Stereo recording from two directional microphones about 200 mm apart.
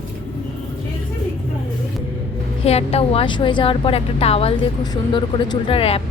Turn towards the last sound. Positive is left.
turn(degrees=30)  # may be behind; listen again after turning